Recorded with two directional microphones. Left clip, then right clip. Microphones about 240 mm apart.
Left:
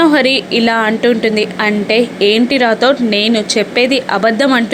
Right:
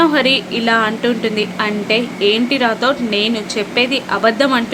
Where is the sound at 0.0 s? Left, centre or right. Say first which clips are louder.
Left 3 dB; left.